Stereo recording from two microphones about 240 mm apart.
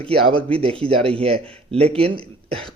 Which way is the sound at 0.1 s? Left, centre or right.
Right.